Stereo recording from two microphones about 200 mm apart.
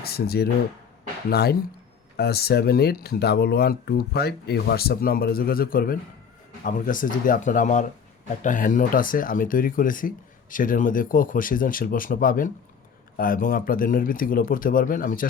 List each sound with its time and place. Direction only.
0.0 s speech: 50° left (ahead or behind)